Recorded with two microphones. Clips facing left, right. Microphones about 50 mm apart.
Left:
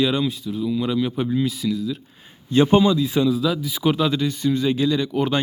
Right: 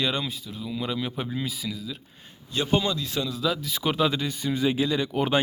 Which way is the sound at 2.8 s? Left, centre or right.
Centre.